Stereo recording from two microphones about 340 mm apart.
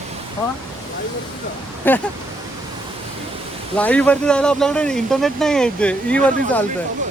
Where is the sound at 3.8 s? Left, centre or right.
Centre.